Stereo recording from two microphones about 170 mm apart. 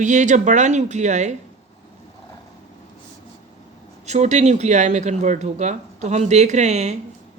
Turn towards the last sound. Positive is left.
turn(degrees=-40)  # may be behind; listen again after turning